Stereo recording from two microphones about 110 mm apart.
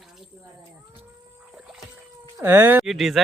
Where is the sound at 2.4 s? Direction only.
20° right (ahead or behind).